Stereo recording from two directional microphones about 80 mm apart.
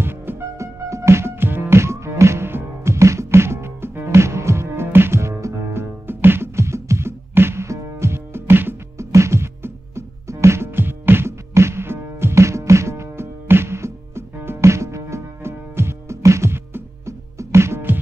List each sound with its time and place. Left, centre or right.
0.0 s music: right